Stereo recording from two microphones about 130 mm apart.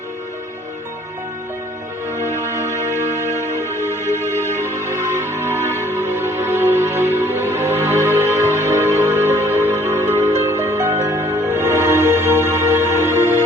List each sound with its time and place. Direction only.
3.5 s music: 20° left (ahead or behind)
4.5 s music: 20° right (ahead or behind)